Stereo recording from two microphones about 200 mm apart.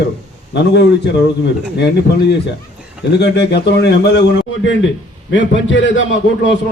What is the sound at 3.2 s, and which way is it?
A man's voice, 55° left (ahead or behind).